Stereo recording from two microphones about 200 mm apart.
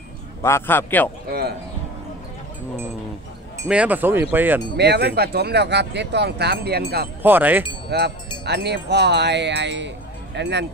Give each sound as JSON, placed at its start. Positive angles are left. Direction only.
{"t": 0.4, "sound": "a man's voice", "side_deg": 15}
{"t": 3.6, "sound": "speech", "side_deg": -5}
{"t": 4.7, "sound": "speech", "side_deg": -55}
{"t": 7.2, "sound": "speech", "side_deg": -10}
{"t": 7.9, "sound": "speech", "side_deg": -55}